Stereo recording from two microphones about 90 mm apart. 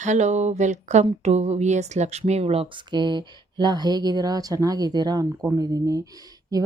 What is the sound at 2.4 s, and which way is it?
Speech, 90° right.